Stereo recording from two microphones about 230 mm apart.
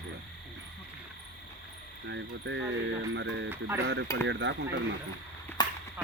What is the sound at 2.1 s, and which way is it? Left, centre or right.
Speech, right.